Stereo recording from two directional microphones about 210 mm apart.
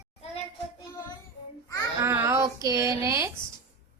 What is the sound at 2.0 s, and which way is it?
Speech, 10° right (ahead or behind).